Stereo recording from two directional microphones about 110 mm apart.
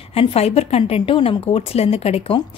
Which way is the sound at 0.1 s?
65° left (ahead or behind).